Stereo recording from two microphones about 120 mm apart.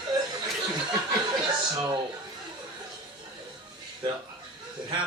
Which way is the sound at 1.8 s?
40° right (ahead or behind).